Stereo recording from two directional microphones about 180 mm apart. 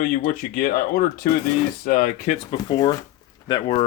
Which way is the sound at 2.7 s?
25° left (ahead or behind).